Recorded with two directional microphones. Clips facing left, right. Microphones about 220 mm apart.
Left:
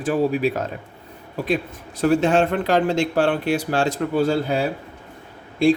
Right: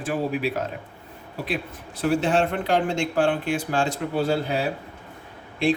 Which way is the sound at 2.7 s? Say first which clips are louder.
Left 3 dB; 75° left (ahead or behind).